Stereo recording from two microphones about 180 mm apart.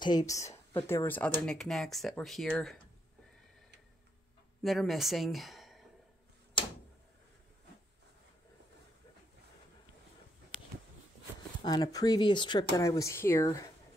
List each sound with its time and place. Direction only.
0.0 s speech: 20° left (ahead or behind); by 2.8 s centre (ahead or behind)
4.6 s speech: centre (ahead or behind)
11.6 s speech: 20° left (ahead or behind)